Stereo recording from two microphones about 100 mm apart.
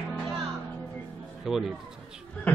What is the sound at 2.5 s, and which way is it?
Speech, 15° left (ahead or behind).